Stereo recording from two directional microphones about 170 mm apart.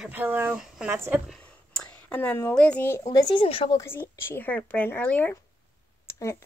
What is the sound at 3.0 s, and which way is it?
Speech, 25° left (ahead or behind).